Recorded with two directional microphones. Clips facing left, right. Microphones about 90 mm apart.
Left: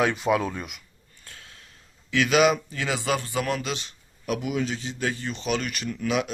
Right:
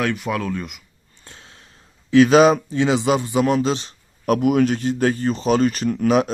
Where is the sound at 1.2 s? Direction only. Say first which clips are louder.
Right 3 dB; 25° right (ahead or behind).